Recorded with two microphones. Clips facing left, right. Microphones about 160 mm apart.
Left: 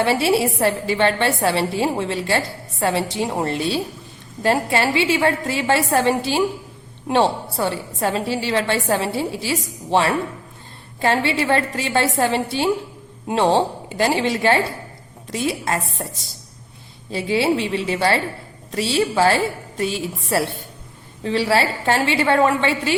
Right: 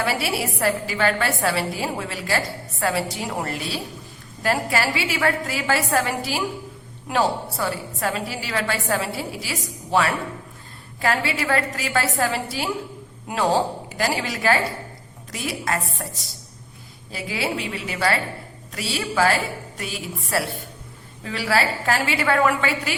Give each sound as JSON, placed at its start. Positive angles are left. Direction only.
{"t": 0.0, "sound": "a woman's voice", "side_deg": 25}